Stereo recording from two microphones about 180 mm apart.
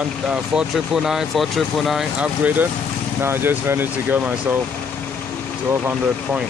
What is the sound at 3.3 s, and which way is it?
Speech, 10° right (ahead or behind).